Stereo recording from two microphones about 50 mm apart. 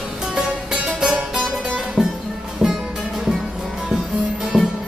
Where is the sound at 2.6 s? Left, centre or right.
Centre.